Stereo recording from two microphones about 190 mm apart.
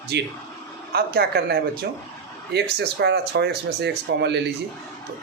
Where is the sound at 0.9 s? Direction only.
55° right (ahead or behind).